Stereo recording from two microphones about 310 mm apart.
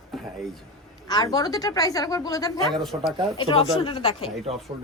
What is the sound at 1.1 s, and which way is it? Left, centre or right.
A woman's voice, centre.